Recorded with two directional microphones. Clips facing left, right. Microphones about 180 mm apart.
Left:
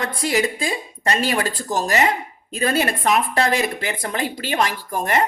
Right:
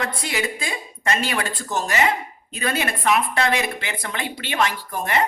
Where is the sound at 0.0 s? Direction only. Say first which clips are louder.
Left 5 dB; 40° left (ahead or behind).